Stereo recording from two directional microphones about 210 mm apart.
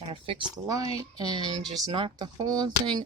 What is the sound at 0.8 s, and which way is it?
Speech, 25° left (ahead or behind).